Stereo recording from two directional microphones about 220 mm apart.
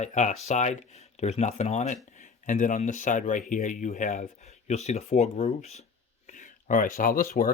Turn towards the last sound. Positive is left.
turn(degrees=40)  # may be behind; listen again after turning